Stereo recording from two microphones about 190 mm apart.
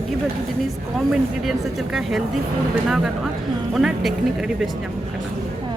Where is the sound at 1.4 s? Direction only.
Centre (ahead or behind).